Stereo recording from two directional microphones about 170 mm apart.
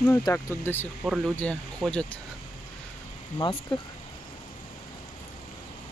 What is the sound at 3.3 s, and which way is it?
Speech, 25° left (ahead or behind).